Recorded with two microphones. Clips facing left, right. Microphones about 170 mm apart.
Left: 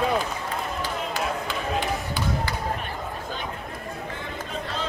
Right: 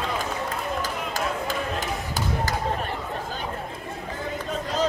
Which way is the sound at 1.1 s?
45° right (ahead or behind).